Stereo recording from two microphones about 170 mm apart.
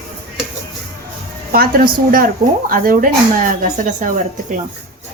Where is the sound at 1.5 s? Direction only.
60° right (ahead or behind).